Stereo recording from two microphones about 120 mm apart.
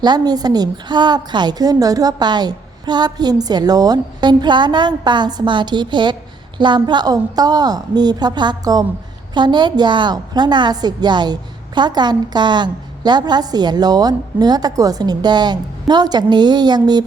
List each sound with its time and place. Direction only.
0.0 s a woman's voice: 35° right (ahead or behind)